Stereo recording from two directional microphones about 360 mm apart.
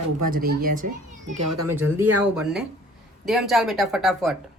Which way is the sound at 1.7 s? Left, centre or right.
Centre.